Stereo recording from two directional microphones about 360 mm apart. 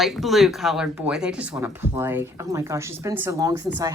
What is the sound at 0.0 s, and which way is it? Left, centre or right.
Speech, centre.